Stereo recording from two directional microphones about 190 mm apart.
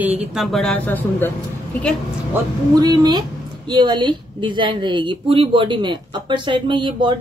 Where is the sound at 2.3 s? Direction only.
20° right (ahead or behind).